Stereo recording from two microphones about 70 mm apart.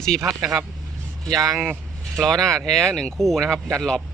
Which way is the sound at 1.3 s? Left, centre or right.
Right.